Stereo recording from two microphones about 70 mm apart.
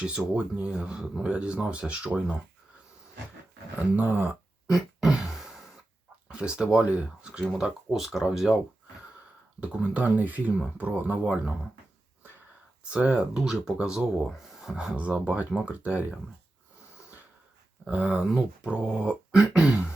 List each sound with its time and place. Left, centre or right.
0.3 s speech: centre
3.9 s speech: right
4.7 s a sound: centre
6.2 s speech: centre
9.6 s speech: centre
11.2 s speech: centre
12.9 s speech: centre
17.8 s speech: right